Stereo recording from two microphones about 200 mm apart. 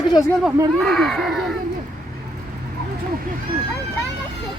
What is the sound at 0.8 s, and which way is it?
Speech, centre (ahead or behind).